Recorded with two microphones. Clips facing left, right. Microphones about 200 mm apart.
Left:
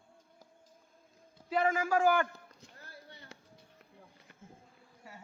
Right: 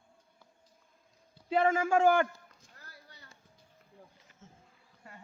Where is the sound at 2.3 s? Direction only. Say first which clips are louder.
Left 3 dB; 70° left (ahead or behind).